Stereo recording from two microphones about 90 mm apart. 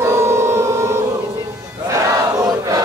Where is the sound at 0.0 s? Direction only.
30° right (ahead or behind).